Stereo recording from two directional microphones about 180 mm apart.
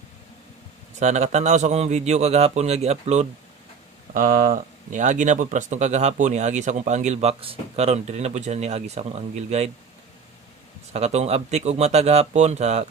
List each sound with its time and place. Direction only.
0.9 s speech: 40° right (ahead or behind)
4.1 s speech: 50° right (ahead or behind)
10.9 s speech: 35° right (ahead or behind)